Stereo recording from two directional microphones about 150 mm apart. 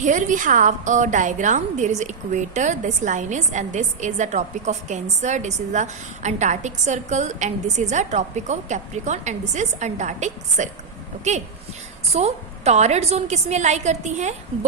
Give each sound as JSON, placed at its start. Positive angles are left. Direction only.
{"t": 0.0, "sound": "a woman's voice", "side_deg": -55}